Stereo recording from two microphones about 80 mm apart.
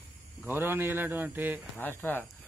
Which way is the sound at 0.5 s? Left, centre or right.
Right.